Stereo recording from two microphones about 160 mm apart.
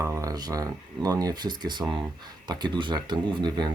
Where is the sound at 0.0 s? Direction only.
20° right (ahead or behind).